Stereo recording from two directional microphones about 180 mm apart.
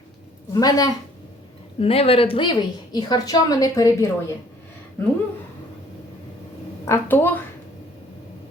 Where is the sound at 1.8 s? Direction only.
30° left (ahead or behind).